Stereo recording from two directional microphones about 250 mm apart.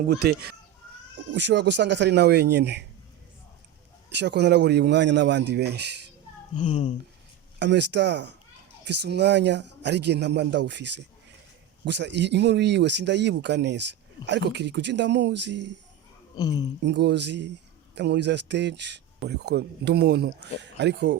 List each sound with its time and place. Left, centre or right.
0.1 s speech: right
4.1 s speech: right
6.6 s speech: centre
7.6 s speech: right
16.3 s speech: centre
16.8 s speech: right